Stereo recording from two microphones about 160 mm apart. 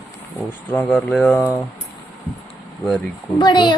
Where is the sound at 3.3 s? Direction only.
30° left (ahead or behind).